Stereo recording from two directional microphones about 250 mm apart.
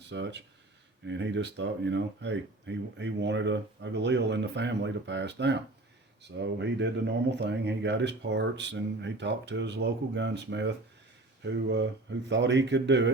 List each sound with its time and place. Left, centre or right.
0.1 s speech: right